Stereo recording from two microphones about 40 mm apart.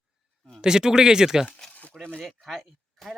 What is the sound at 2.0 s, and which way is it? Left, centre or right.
Speech, left.